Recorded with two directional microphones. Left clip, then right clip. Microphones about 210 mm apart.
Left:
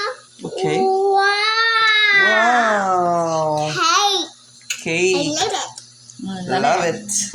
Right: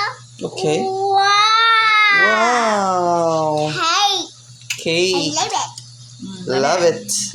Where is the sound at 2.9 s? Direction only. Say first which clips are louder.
Even; 25° right (ahead or behind).